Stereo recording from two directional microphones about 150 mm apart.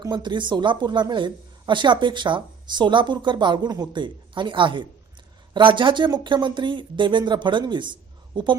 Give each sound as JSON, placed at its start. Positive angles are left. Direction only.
{"t": 0.0, "sound": "speech", "side_deg": -30}